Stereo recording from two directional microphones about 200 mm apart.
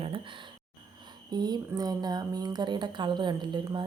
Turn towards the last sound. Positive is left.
turn(degrees=-20)  # may be behind; listen again after turning